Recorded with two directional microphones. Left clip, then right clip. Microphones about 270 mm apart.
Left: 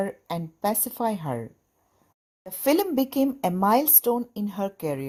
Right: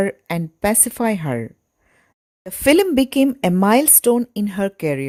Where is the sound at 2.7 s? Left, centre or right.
Right.